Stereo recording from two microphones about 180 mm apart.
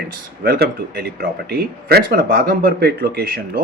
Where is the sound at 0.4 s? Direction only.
60° right (ahead or behind).